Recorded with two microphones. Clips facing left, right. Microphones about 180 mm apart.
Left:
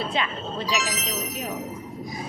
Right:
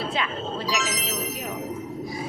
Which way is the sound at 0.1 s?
5° right (ahead or behind).